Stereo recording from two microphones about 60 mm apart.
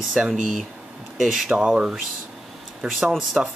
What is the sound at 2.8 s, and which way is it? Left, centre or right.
Speech, centre.